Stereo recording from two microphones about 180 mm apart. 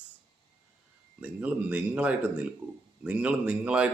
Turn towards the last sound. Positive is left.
turn(degrees=-5)  # may be behind; listen again after turning